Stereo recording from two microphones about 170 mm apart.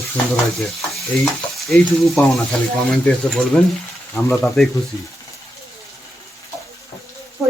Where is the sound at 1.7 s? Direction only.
Centre (ahead or behind).